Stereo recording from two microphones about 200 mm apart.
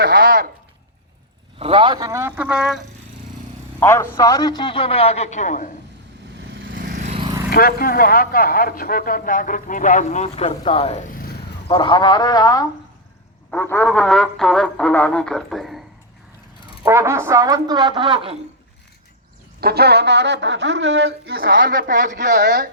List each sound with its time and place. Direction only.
0.0 s a sound: 50° right (ahead or behind)
1.5 s speech: 30° right (ahead or behind); by 2.8 s 5° right (ahead or behind)
3.8 s a man's voice: 10° left (ahead or behind); by 5.6 s 35° left (ahead or behind)
6.3 s vehicle: 65° right (ahead or behind)
6.7 s vehicle: 40° right (ahead or behind)
7.2 s vehicle: 20° right (ahead or behind)
7.5 s speech: 50° left (ahead or behind); by 11.0 s 30° left (ahead or behind)
11.1 s a sound: 45° left (ahead or behind)
11.7 s a man's voice: 20° left (ahead or behind); by 15.8 s centre (ahead or behind)
16.8 s a woman's voice: 15° right (ahead or behind)
19.5 s speech: 50° right (ahead or behind)